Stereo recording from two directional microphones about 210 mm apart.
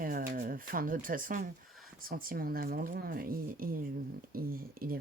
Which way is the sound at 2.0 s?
45° right (ahead or behind).